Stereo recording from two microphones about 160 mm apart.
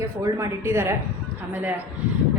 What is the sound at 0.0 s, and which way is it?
Speech, 20° right (ahead or behind).